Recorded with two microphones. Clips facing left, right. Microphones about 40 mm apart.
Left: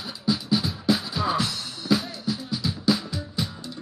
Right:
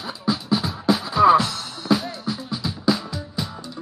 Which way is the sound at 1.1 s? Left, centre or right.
Right.